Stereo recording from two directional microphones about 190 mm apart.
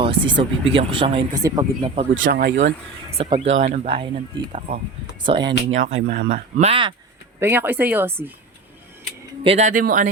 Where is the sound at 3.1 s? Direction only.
30° right (ahead or behind).